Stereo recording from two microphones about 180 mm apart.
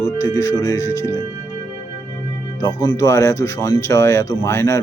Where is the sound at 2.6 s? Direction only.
20° left (ahead or behind).